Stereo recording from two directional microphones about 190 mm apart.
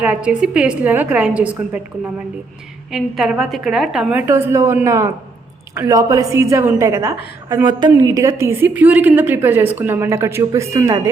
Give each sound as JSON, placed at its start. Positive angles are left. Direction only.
{"t": 0.0, "sound": "a woman's voice", "side_deg": -5}
{"t": 2.9, "sound": "a woman's voice", "side_deg": 0}